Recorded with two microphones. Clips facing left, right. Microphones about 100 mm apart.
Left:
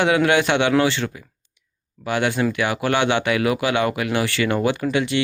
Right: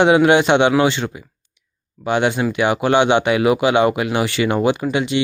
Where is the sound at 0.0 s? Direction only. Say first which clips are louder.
Right 5 dB; 20° right (ahead or behind).